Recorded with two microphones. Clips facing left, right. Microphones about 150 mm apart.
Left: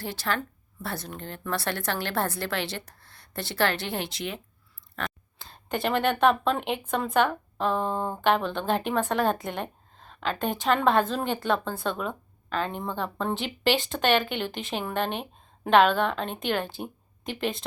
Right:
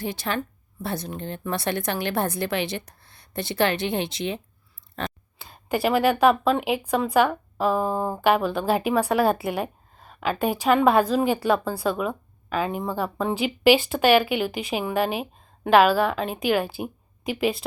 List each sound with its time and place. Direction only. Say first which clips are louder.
0.0 s speech: right 2 dB; 15° right (ahead or behind)
5.0 s a sound: right 3 dB; 25° right (ahead or behind)
5.4 s speech: right 5 dB; 5° right (ahead or behind)